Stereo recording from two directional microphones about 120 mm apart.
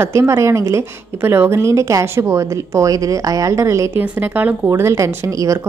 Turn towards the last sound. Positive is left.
turn(degrees=-25)  # may be behind; listen again after turning